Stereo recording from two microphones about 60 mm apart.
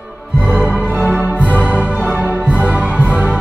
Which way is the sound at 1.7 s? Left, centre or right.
Left.